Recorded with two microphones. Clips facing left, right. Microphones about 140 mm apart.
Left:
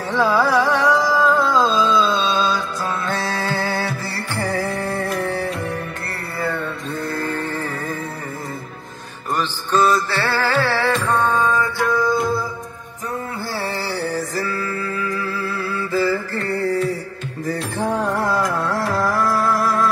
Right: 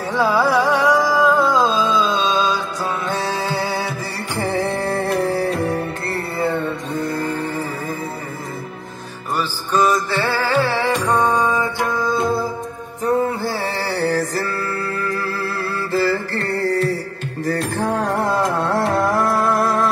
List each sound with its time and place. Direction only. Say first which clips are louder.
0.1 s music: even; 10° right (ahead or behind)
4.4 s music: right 2 dB; 25° right (ahead or behind)
6.4 s music: right 2 dB; 20° right (ahead or behind)
9.4 s music: even; 15° right (ahead or behind)
14.3 s music: right 1 dB; 70° right (ahead or behind)
18.2 s music: right 1 dB; 25° right (ahead or behind)